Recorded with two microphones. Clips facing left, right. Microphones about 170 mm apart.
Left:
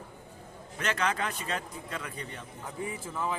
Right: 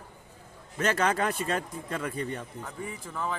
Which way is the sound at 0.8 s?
40° right (ahead or behind).